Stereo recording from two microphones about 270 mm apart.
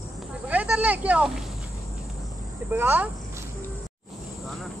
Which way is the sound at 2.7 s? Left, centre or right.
Centre.